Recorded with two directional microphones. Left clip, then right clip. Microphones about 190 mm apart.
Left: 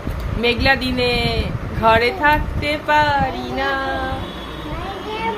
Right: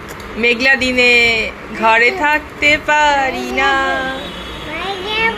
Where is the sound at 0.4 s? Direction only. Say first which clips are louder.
Right 5 dB; 10° right (ahead or behind).